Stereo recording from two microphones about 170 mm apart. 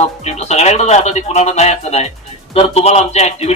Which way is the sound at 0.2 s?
40° left (ahead or behind).